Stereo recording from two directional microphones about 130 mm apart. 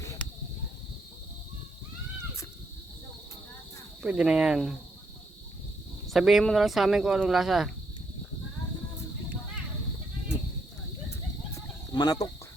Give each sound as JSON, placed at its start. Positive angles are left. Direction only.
{"t": 4.0, "sound": "speech", "side_deg": -5}
{"t": 6.1, "sound": "speech", "side_deg": 0}
{"t": 11.1, "sound": "chicken", "side_deg": 25}